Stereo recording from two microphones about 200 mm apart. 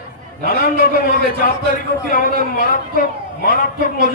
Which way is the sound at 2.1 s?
45° left (ahead or behind).